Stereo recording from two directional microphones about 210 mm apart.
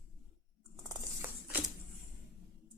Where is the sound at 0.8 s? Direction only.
15° right (ahead or behind).